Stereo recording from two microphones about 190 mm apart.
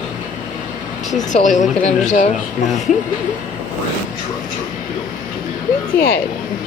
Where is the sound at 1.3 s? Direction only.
40° left (ahead or behind).